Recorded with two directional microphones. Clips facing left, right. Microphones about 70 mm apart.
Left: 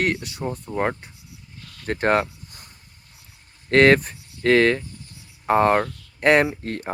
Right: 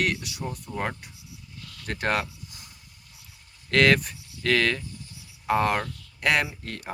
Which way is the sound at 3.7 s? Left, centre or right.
Left.